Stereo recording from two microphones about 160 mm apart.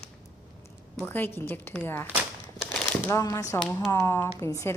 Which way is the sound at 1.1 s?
10° left (ahead or behind).